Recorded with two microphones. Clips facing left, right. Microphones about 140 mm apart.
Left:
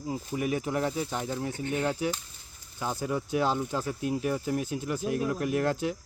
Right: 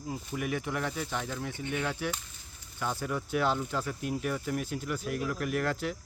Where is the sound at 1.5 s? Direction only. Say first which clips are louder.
Left 4 dB; 40° left (ahead or behind).